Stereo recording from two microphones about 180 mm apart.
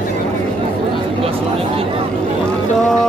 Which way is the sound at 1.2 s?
30° right (ahead or behind).